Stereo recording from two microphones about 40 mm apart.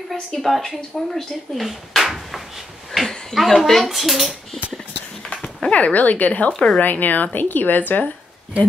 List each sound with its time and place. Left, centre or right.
0.1 s speech: centre
2.9 s a sound: centre
3.3 s speech: centre
5.3 s dog: centre
5.7 s a woman's voice: left